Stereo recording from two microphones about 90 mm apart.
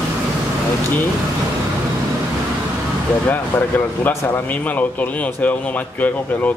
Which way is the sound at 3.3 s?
20° left (ahead or behind).